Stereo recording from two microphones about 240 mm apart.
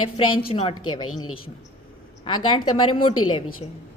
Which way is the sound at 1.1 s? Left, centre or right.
Left.